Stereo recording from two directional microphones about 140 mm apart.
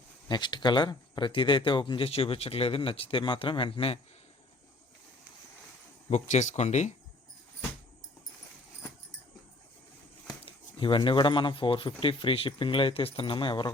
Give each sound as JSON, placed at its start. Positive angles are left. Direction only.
{"t": 0.3, "sound": "speech", "side_deg": 35}
{"t": 6.1, "sound": "speech", "side_deg": 55}
{"t": 10.8, "sound": "speech", "side_deg": 35}